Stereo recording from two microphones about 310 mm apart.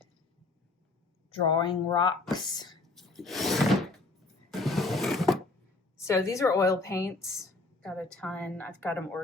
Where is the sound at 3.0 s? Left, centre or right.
Centre.